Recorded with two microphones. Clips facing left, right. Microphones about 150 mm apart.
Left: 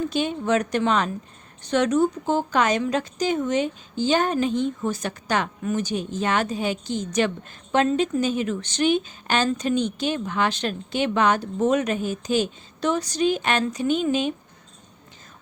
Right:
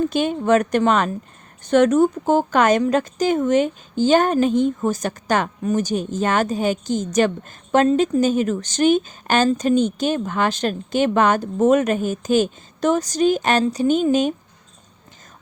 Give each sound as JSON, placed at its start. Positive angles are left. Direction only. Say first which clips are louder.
{"t": 0.1, "sound": "a woman's voice", "louder": "right 5 dB", "side_deg": -50}